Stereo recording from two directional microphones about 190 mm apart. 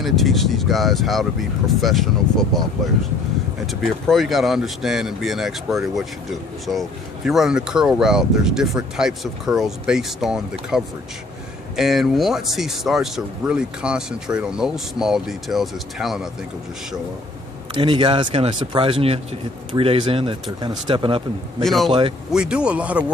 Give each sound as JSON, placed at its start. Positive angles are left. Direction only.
{"t": 0.0, "sound": "speech", "side_deg": 0}
{"t": 3.7, "sound": "speech", "side_deg": 0}
{"t": 17.7, "sound": "speech", "side_deg": -25}
{"t": 21.6, "sound": "speech", "side_deg": 0}
{"t": 21.8, "sound": "speech", "side_deg": -30}
{"t": 22.3, "sound": "speech", "side_deg": -5}